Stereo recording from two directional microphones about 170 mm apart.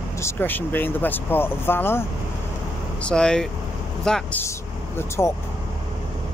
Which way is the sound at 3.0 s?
5° left (ahead or behind).